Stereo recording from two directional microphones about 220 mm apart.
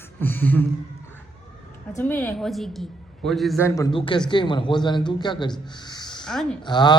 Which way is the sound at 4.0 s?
25° left (ahead or behind).